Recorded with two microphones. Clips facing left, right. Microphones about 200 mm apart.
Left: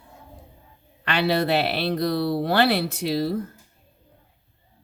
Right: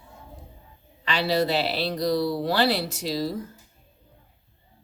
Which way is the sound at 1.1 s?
60° left (ahead or behind).